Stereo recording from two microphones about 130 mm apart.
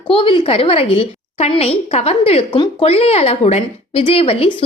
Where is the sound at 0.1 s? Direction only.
45° left (ahead or behind).